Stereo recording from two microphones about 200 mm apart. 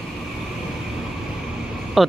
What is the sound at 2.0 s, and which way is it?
Speech, centre (ahead or behind).